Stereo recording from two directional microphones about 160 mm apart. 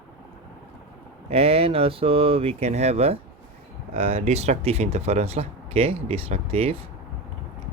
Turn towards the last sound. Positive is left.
turn(degrees=-40)  # may be behind; listen again after turning